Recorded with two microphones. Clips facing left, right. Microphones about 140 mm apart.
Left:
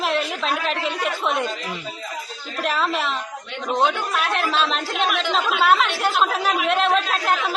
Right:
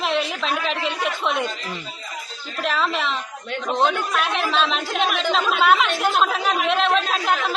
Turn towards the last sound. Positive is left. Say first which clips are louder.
# even
turn(degrees=0)  # may be behind; listen again after turning